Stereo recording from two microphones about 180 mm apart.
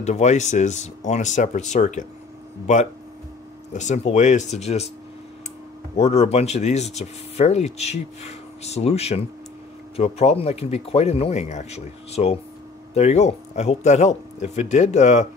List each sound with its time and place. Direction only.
0.0 s speech: 40° left (ahead or behind)
5.9 s speech: 35° left (ahead or behind)